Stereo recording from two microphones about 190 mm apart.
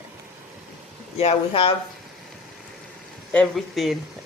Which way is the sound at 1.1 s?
30° left (ahead or behind).